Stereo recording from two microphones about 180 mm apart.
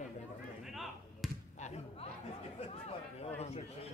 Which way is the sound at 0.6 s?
Centre (ahead or behind).